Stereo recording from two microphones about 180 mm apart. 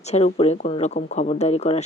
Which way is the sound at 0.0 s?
40° left (ahead or behind).